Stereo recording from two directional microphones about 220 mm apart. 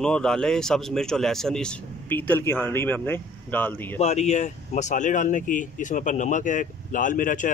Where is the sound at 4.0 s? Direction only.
30° left (ahead or behind).